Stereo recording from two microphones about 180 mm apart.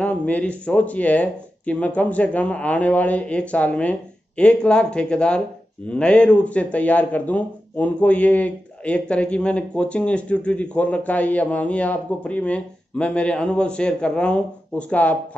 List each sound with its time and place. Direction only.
0.0 s speech: 5° left (ahead or behind)